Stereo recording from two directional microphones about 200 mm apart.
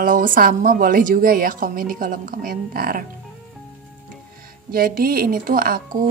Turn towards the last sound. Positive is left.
turn(degrees=-45)  # may be behind; listen again after turning